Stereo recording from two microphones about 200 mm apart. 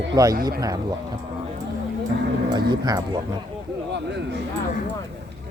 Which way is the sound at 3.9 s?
60° right (ahead or behind).